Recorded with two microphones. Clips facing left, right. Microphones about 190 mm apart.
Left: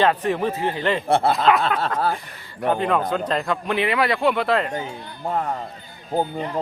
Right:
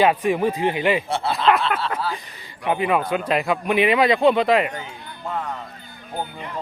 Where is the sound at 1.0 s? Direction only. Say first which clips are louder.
Left 5 dB; 55° left (ahead or behind).